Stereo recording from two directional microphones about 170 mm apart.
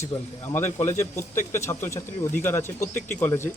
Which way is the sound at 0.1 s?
35° left (ahead or behind).